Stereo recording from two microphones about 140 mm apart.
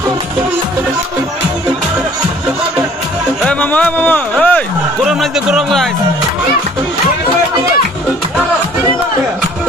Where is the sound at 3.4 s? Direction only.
10° left (ahead or behind).